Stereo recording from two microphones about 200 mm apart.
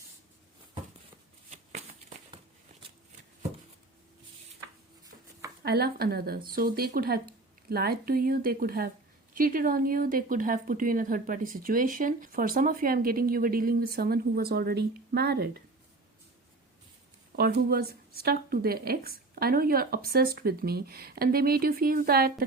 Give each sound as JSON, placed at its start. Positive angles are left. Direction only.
{"t": 1.5, "sound": "shuffling cards", "side_deg": -35}
{"t": 5.6, "sound": "a woman's voice", "side_deg": -50}
{"t": 17.3, "sound": "a woman's voice", "side_deg": -50}